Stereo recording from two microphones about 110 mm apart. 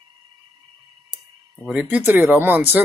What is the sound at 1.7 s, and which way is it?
Speech, 10° right (ahead or behind).